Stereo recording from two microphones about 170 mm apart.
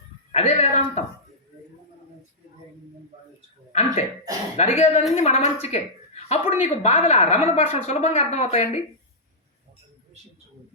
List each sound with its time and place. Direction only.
0.3 s a woman's voice: 40° left (ahead or behind)
3.7 s a sound: 40° left (ahead or behind)
4.5 s a woman's voice: 40° left (ahead or behind)